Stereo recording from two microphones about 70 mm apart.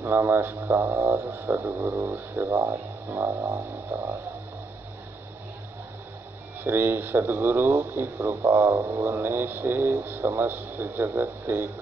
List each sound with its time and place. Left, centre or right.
0.0 s speech: right
2.4 s speech: right
6.6 s speech: right